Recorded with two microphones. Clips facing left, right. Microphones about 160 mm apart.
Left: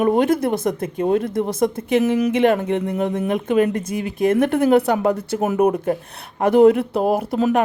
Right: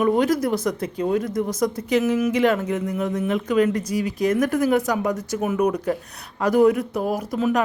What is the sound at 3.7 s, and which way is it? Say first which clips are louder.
Speech: left 1 dB; 55° left (ahead or behind).